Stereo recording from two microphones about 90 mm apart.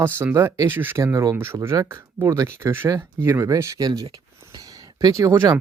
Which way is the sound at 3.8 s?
50° right (ahead or behind).